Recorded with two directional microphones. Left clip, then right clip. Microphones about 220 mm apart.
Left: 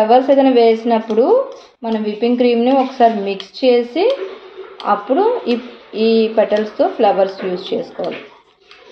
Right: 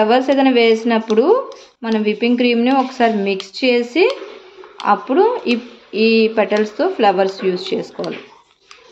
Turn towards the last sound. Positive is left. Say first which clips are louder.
# right 1 dB
turn(degrees=-40)  # may be behind; listen again after turning